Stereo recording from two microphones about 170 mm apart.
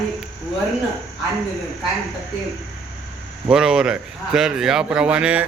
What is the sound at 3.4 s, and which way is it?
A man's voice, 5° right (ahead or behind).